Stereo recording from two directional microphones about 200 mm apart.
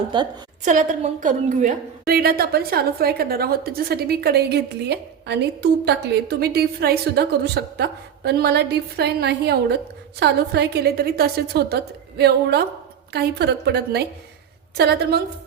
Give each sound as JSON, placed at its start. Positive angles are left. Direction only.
{"t": 0.1, "sound": "a woman's voice", "side_deg": -25}
{"t": 0.6, "sound": "a woman's voice", "side_deg": -40}